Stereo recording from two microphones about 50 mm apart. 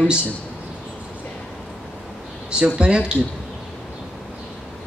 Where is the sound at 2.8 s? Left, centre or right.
Centre.